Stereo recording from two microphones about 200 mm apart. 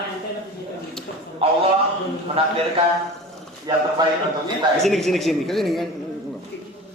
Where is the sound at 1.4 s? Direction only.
30° right (ahead or behind).